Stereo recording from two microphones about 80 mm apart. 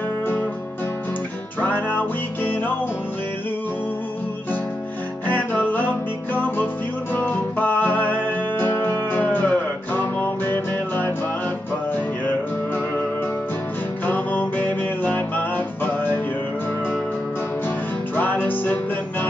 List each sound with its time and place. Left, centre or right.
1.6 s music: left
5.3 s music: left
12.3 s music: left
14.0 s music: left
18.1 s music: left